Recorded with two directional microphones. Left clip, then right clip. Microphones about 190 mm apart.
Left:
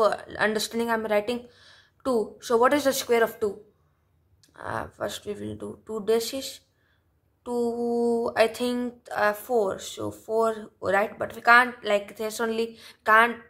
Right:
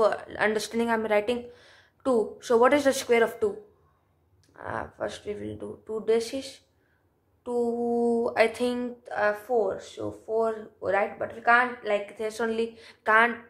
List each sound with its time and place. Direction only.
0.0 s speech: 35° left (ahead or behind)
4.6 s speech: 40° left (ahead or behind)